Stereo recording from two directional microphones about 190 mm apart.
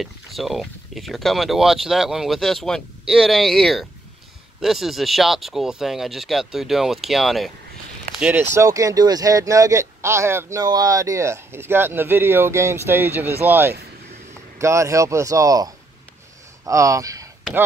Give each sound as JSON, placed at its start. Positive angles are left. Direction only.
{"t": 0.0, "sound": "speech", "side_deg": 0}